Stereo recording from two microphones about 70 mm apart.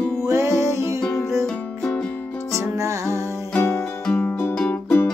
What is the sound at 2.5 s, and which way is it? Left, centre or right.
Music, right.